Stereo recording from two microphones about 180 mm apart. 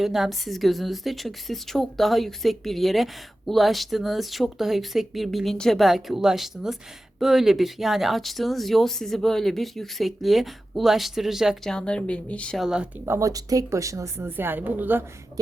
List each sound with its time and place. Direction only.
0.0 s a woman's voice: centre (ahead or behind)
13.1 s a woman's voice: 20° right (ahead or behind)